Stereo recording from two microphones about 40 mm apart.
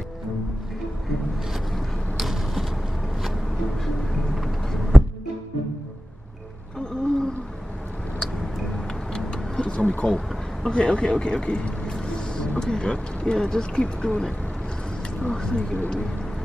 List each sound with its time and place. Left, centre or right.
2.1 s a sound: centre
6.8 s a sound: centre
8.2 s vehicle: centre
9.3 s bird: left
9.9 s speech: left
15.3 s speech: left